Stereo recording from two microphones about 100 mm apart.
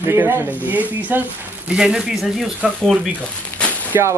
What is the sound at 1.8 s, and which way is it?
Speech, 5° right (ahead or behind).